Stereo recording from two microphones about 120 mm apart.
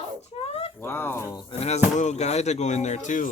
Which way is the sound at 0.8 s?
20° left (ahead or behind).